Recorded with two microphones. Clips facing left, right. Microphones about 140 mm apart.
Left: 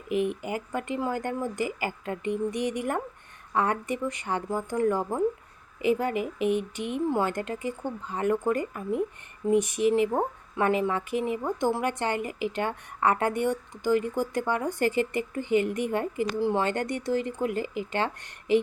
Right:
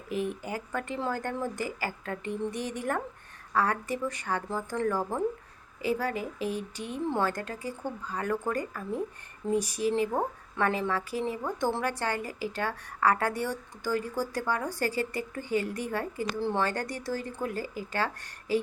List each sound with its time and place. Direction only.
0.4 s a woman's voice: 15° left (ahead or behind)